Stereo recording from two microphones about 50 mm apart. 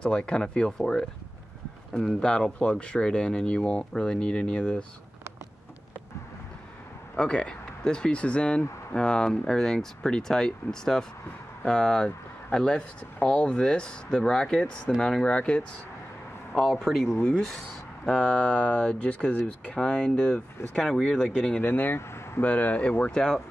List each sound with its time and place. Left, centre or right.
0.0 s speech: centre
2.1 s speech: left
7.2 s speech: centre
16.6 s speech: centre
18.2 s speech: left
19.8 s speech: centre
21.6 s speech: left
22.4 s speech: left
23.1 s speech: centre